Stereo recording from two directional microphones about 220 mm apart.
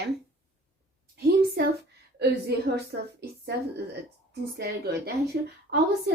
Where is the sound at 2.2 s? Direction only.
45° right (ahead or behind).